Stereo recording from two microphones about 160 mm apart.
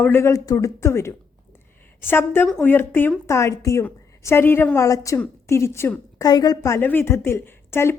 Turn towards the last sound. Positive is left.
turn(degrees=15)  # may be behind; listen again after turning